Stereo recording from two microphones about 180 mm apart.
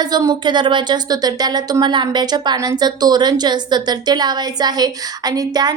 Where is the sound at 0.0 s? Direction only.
20° right (ahead or behind).